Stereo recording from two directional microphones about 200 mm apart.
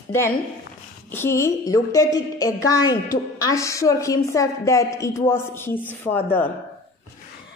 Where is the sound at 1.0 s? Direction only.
10° left (ahead or behind).